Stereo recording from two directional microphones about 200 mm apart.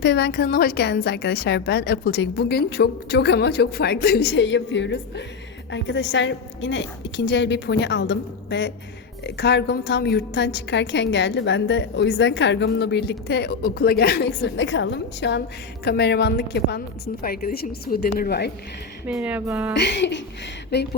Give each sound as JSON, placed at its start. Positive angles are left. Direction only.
{"t": 0.0, "sound": "a woman's voice", "side_deg": 55}
{"t": 19.0, "sound": "speech", "side_deg": -5}
{"t": 19.7, "sound": "a woman's voice", "side_deg": 60}